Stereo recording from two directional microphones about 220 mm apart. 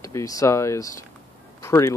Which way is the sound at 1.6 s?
15° left (ahead or behind).